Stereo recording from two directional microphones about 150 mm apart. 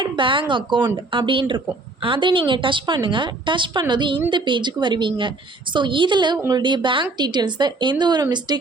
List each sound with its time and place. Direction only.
0.0 s a woman's voice: 35° right (ahead or behind)